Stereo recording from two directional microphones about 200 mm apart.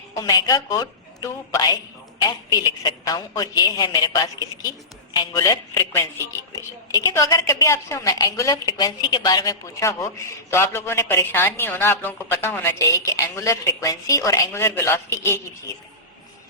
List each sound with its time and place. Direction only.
0.2 s a woman's voice: 15° left (ahead or behind)